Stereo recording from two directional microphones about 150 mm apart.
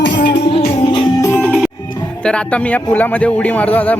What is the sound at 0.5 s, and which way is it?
Music, 35° left (ahead or behind).